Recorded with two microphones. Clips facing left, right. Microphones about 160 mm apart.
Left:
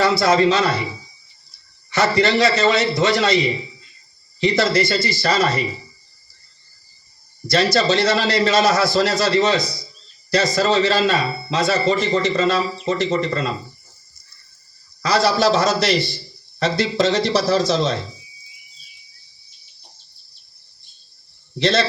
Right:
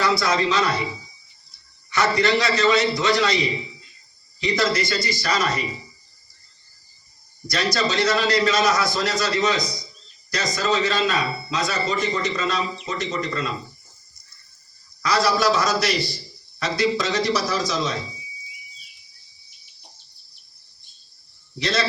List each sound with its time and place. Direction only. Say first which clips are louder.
0.0 s a man's voice: left 6 dB; 25° left (ahead or behind)
1.9 s a man's voice: left 3 dB; 25° left (ahead or behind)
7.4 s a man's voice: left 6 dB; 30° left (ahead or behind)
15.0 s a man's voice: left 3 dB; 25° left (ahead or behind)
21.6 s a man's voice: left 6 dB; 25° left (ahead or behind)